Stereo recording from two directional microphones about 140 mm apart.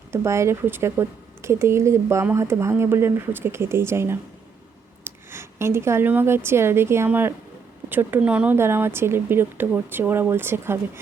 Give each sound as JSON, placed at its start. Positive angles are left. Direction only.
{"t": 0.1, "sound": "speech", "side_deg": -20}